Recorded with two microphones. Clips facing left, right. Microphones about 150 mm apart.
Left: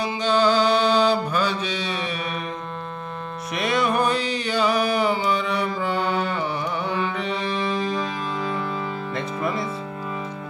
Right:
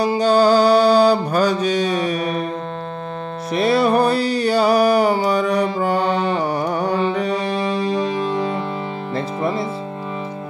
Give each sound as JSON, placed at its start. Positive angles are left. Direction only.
{"t": 0.0, "sound": "mantra", "side_deg": -40}
{"t": 3.5, "sound": "music", "side_deg": -35}
{"t": 5.8, "sound": "carnatic music", "side_deg": -40}
{"t": 9.1, "sound": "music", "side_deg": -30}